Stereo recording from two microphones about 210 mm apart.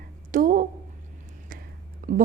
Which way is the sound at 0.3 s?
40° right (ahead or behind).